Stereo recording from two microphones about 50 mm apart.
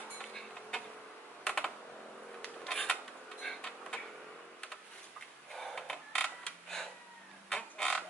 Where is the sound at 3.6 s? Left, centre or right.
Centre.